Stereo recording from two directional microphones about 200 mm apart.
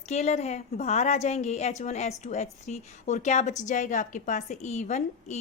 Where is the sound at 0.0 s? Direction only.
35° left (ahead or behind).